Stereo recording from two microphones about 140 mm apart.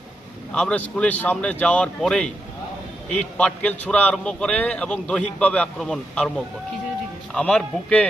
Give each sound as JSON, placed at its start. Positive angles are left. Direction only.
{"t": 0.5, "sound": "a man's voice", "side_deg": 10}